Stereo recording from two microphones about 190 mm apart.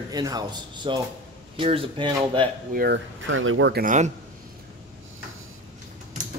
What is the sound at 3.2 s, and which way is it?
Speech, 90° right.